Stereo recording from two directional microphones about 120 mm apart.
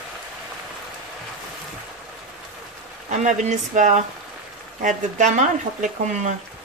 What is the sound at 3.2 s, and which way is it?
Speech, 85° right.